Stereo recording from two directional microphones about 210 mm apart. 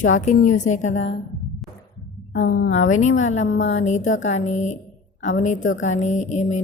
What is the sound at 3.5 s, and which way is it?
Speech, 60° left (ahead or behind).